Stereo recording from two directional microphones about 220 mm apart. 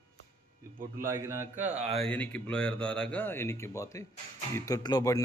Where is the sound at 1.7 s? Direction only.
30° right (ahead or behind).